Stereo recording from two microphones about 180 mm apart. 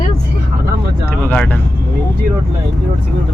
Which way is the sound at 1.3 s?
10° left (ahead or behind).